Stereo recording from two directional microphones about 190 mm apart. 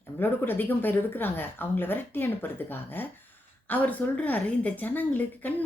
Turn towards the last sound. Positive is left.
turn(degrees=10)  # may be behind; listen again after turning